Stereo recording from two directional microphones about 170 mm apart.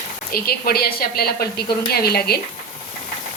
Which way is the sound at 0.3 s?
60° left (ahead or behind).